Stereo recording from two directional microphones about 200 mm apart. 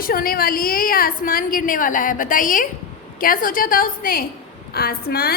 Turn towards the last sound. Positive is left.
turn(degrees=50)  # may be behind; listen again after turning